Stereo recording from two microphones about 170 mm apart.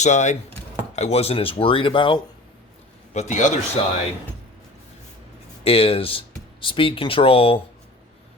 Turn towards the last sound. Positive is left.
turn(degrees=35)  # may be behind; listen again after turning